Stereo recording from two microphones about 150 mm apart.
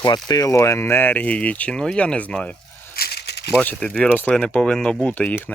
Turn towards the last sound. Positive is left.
turn(degrees=10)  # may be behind; listen again after turning